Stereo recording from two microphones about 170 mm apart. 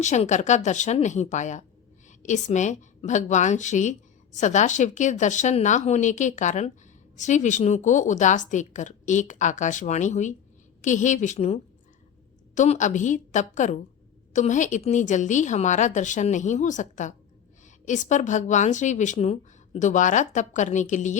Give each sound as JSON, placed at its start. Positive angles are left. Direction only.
{"t": 0.0, "sound": "a woman's voice", "side_deg": 45}